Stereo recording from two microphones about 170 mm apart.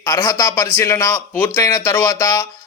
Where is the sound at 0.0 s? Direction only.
20° left (ahead or behind).